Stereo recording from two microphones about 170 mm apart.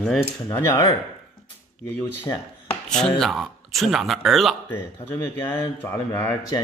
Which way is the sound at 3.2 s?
Centre (ahead or behind).